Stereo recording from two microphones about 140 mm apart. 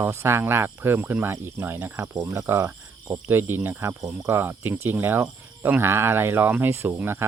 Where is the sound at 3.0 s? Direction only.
10° right (ahead or behind).